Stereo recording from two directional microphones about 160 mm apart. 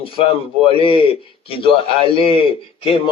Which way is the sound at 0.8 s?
35° left (ahead or behind).